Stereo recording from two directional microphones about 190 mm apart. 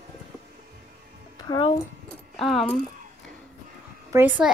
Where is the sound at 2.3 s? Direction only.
Centre (ahead or behind).